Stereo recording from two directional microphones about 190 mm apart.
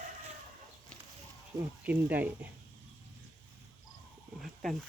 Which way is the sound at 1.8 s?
10° right (ahead or behind).